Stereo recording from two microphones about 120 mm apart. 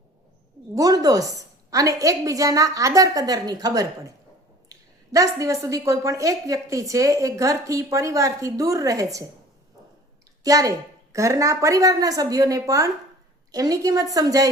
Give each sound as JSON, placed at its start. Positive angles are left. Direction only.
{"t": 0.8, "sound": "a woman's voice", "side_deg": -30}
{"t": 10.4, "sound": "a woman's voice", "side_deg": -30}